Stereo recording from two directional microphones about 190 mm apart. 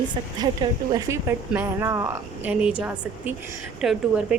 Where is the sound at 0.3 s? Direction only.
20° right (ahead or behind).